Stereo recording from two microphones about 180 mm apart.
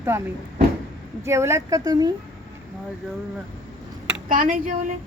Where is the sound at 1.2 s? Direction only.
15° right (ahead or behind).